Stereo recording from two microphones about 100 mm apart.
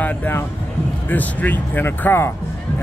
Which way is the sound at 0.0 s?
20° left (ahead or behind).